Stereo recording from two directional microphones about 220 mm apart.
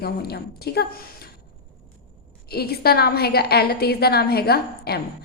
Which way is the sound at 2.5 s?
45° left (ahead or behind).